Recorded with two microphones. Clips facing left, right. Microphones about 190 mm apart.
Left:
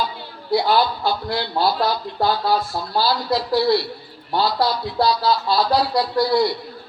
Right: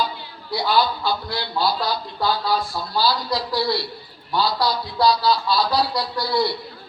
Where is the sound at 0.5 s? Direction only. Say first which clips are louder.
Left 3 dB; 50° left (ahead or behind).